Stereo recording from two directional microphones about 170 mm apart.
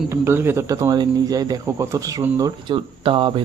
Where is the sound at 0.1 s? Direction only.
15° right (ahead or behind).